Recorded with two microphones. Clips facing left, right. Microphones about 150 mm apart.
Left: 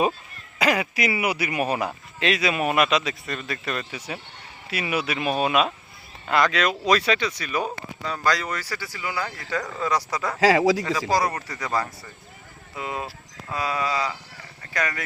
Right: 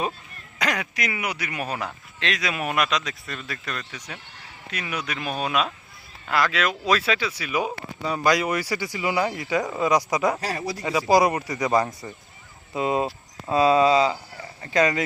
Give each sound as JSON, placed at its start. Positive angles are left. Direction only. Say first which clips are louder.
{"t": 0.6, "sound": "speech", "louder": "left 4 dB", "side_deg": 5}
{"t": 10.4, "sound": "a man's voice", "louder": "left 11 dB", "side_deg": 90}
{"t": 11.1, "sound": "speech", "louder": "right 7 dB", "side_deg": -10}